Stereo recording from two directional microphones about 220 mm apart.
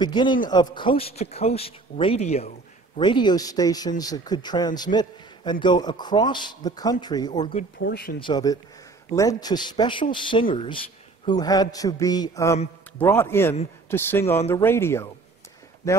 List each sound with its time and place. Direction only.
0.0 s a man's voice: 20° left (ahead or behind)
7.8 s speech: 45° left (ahead or behind)
8.2 s a man's voice: 20° left (ahead or behind)